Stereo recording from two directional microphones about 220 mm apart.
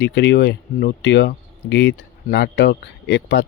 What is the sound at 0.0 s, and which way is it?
Speech, 50° left (ahead or behind).